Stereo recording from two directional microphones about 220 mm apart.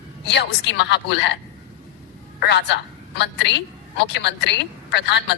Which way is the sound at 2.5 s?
55° left (ahead or behind).